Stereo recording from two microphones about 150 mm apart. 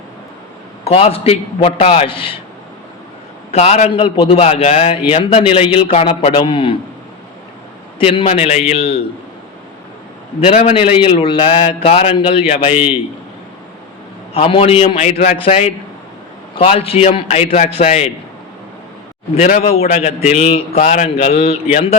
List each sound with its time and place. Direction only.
0.9 s a man's voice: 40° left (ahead or behind)
3.5 s a man's voice: 45° left (ahead or behind)
7.9 s a man's voice: 40° left (ahead or behind)
10.4 s a man's voice: 45° left (ahead or behind)
14.3 s a man's voice: 40° left (ahead or behind)
19.4 s a man's voice: 50° left (ahead or behind)
20.8 s a man's voice: 55° left (ahead or behind)